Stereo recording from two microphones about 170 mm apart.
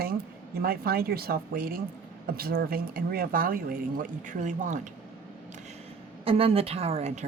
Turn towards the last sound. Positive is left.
turn(degrees=-40)  # may be behind; listen again after turning